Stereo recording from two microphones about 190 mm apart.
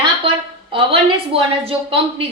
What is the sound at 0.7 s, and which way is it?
A woman's voice, 30° right (ahead or behind).